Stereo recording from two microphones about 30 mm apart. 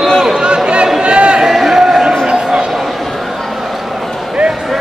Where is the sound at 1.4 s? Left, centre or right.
Centre.